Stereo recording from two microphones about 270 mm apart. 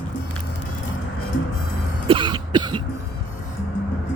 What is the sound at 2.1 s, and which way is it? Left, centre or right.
Cough, centre.